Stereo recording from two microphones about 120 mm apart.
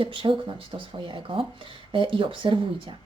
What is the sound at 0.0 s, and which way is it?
A woman's voice, 45° right (ahead or behind).